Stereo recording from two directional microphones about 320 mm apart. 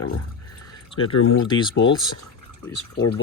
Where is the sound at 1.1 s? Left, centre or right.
Left.